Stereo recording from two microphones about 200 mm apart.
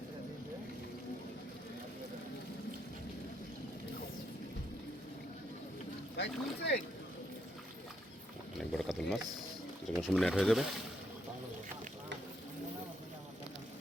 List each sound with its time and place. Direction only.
6.1 s speech: 55° left (ahead or behind)
8.5 s speech: centre (ahead or behind)